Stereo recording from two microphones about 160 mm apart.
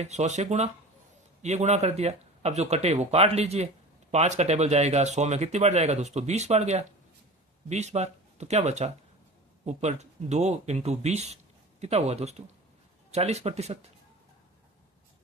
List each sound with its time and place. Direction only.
0.0 s speech: 45° right (ahead or behind)